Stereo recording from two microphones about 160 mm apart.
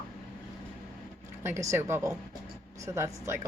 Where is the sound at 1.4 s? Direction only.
15° right (ahead or behind).